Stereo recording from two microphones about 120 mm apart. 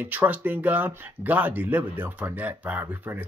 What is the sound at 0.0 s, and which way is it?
Speech, 15° right (ahead or behind).